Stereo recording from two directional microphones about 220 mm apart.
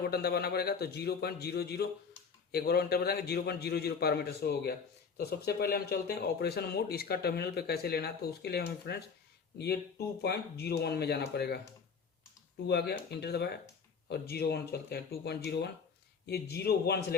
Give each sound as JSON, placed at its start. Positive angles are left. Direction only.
{"t": 0.0, "sound": "speech", "side_deg": 45}
{"t": 10.2, "sound": "speech", "side_deg": 45}
{"t": 12.6, "sound": "speech", "side_deg": 45}